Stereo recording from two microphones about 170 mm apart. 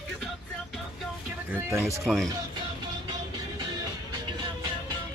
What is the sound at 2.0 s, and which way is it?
Speech, 5° left (ahead or behind).